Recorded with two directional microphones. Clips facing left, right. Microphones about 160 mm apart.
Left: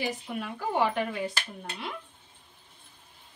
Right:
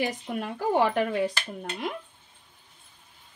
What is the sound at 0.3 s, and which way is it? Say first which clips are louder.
Speech: right 5 dB; 40° right (ahead or behind).